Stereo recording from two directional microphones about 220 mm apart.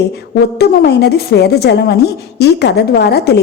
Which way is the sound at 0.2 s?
45° left (ahead or behind).